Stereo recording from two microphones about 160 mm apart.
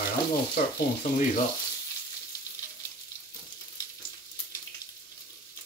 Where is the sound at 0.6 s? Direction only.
60° left (ahead or behind).